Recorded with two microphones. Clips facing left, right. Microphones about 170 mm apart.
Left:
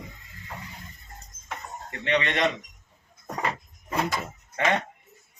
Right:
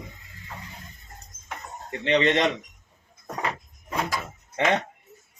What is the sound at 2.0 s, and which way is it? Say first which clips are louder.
Speech: right 5 dB; 30° right (ahead or behind).